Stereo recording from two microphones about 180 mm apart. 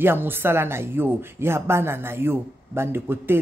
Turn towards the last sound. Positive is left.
turn(degrees=-10)  # may be behind; listen again after turning